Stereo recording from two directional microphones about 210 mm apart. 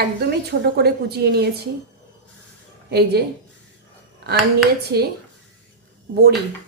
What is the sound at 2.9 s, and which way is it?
Speech, 50° right (ahead or behind).